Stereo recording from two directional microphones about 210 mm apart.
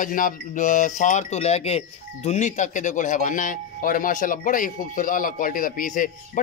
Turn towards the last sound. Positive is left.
turn(degrees=40)  # may be behind; listen again after turning